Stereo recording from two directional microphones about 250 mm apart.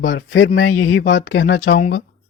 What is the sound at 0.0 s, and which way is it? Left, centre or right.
Speech, left.